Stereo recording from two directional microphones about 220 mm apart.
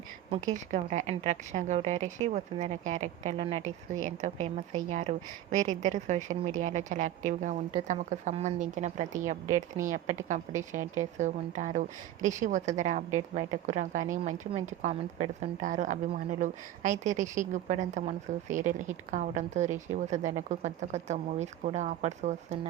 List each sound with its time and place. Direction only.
0.5 s a woman's voice: 35° right (ahead or behind)
3.6 s speech: 65° right (ahead or behind)
4.4 s a woman's voice: 30° right (ahead or behind)